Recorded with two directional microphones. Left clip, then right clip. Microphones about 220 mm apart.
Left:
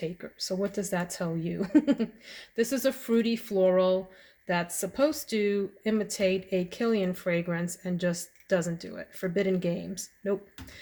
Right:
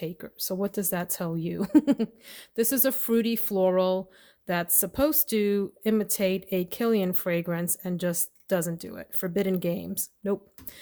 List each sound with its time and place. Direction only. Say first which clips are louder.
0.0 s speech: even; 55° right (ahead or behind)